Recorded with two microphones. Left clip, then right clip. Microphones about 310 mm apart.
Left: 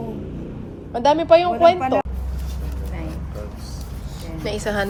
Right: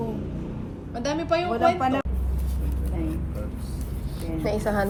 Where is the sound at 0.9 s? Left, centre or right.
Left.